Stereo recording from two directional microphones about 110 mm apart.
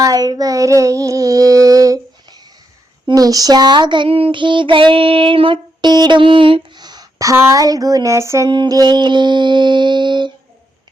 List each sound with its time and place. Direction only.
0.0 s female singing: 35° right (ahead or behind)
3.2 s child singing: 35° right (ahead or behind)
8.4 s child singing: 40° right (ahead or behind)